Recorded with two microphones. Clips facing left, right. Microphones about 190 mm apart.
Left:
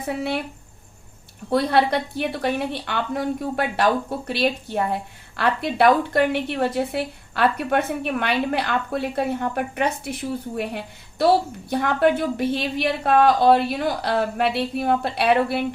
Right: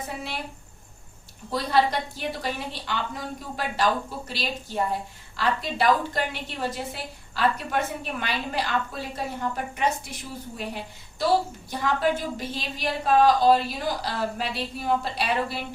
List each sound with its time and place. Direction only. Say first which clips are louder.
0.1 s a woman's voice: left 9 dB; 60° left (ahead or behind)
1.5 s a woman's voice: left 4 dB; 60° left (ahead or behind)